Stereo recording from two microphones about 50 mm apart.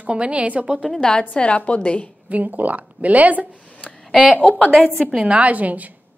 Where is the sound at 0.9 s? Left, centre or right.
Centre.